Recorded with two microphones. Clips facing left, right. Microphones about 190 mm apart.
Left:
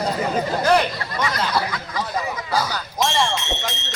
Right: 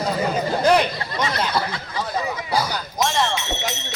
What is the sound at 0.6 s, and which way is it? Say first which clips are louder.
Speech: right 2 dB; 20° right (ahead or behind).